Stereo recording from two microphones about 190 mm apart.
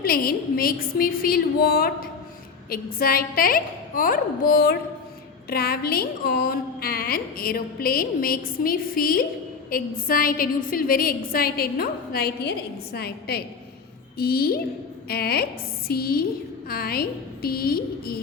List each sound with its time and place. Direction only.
0.0 s a woman's voice: 50° left (ahead or behind)